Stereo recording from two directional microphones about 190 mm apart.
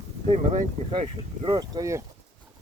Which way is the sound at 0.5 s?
25° right (ahead or behind).